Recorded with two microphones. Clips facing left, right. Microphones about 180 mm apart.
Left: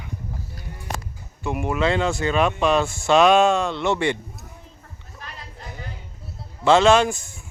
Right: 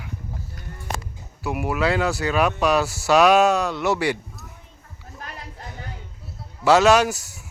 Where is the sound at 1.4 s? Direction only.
5° right (ahead or behind).